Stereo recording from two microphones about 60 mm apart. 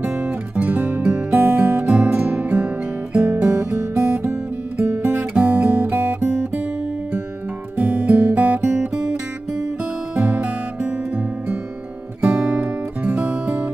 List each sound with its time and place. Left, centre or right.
0.0 s guitar: right
1.3 s music: right
3.4 s guitar: right
4.8 s music: right
5.3 s guitar: right
7.7 s music: right
8.1 s guitar: right
10.1 s music: right
12.5 s music: right